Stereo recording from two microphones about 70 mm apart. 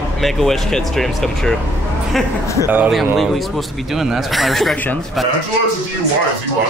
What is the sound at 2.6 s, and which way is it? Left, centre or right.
Speech, right.